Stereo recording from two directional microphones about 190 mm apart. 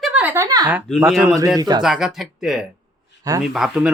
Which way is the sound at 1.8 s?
Centre (ahead or behind).